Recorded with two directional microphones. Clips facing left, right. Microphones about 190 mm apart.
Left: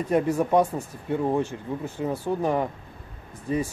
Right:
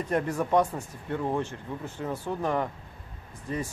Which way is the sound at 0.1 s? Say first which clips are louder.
Left 4 dB; 10° left (ahead or behind).